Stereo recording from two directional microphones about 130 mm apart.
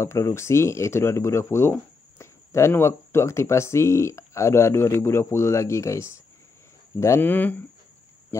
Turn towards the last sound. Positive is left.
turn(degrees=15)  # may be behind; listen again after turning